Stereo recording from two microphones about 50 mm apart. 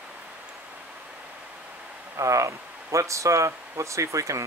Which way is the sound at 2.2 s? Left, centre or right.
Right.